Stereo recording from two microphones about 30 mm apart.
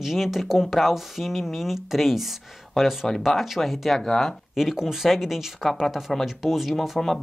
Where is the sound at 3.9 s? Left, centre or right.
Centre.